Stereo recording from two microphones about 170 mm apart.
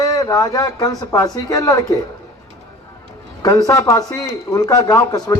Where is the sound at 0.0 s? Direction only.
20° left (ahead or behind).